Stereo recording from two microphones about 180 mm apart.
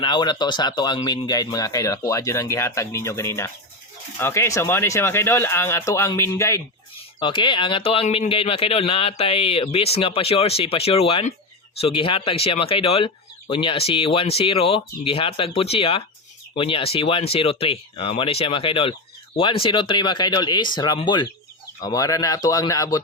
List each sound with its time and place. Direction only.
0.0 s speech: 25° left (ahead or behind)
6.9 s speech: 30° left (ahead or behind)